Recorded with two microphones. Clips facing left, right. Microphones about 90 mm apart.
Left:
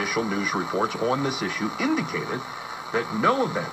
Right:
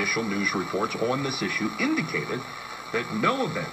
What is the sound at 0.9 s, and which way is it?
Speech, 10° left (ahead or behind).